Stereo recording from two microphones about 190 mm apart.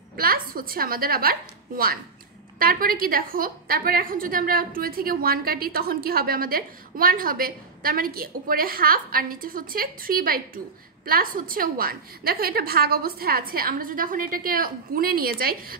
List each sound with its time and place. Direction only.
0.1 s a woman's voice: 50° right (ahead or behind)
2.6 s a woman's voice: 50° right (ahead or behind)